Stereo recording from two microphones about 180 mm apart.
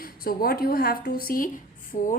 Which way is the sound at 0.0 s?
55° left (ahead or behind).